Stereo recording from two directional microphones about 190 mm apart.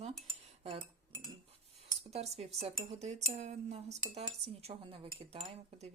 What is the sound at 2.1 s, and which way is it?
Speech, 35° right (ahead or behind).